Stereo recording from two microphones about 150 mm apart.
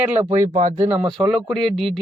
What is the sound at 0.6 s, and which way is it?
Speech, 60° right (ahead or behind).